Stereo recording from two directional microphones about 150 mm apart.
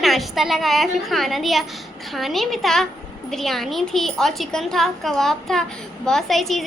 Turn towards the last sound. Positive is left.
turn(degrees=0)  # may be behind; listen again after turning